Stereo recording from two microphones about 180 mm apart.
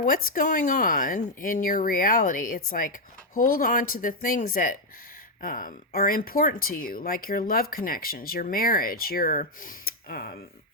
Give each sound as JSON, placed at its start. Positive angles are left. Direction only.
{"t": 0.0, "sound": "speech", "side_deg": 50}